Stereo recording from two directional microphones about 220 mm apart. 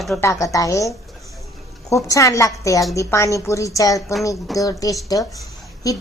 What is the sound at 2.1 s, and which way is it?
Speech, 15° left (ahead or behind).